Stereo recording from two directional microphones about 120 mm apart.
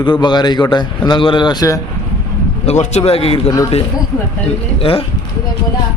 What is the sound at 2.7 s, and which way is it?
Speech, 65° left (ahead or behind).